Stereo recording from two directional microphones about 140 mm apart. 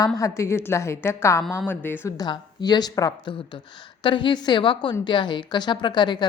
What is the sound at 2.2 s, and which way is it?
A woman's voice, 30° left (ahead or behind).